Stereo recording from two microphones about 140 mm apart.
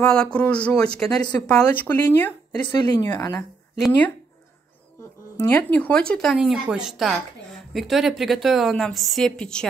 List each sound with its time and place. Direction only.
0.0 s speech: 5° left (ahead or behind)
2.5 s speech: 30° left (ahead or behind)
5.5 s a woman's voice: 10° left (ahead or behind)